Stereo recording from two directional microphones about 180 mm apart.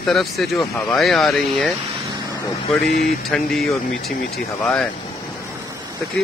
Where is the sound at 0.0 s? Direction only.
Centre (ahead or behind).